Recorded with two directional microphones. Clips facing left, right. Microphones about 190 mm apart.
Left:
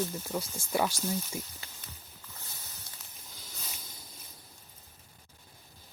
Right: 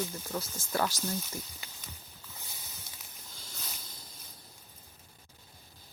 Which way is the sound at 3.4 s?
5° left (ahead or behind).